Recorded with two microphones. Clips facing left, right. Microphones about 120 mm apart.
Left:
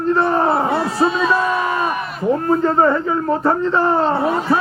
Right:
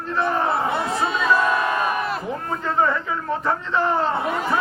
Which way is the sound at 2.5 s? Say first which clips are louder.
Left 6 dB; 40° left (ahead or behind).